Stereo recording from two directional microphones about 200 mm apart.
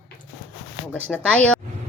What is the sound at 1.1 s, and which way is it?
Speech, 5° left (ahead or behind).